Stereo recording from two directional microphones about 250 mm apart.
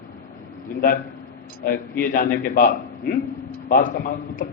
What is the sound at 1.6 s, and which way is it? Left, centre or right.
A man's voice, left.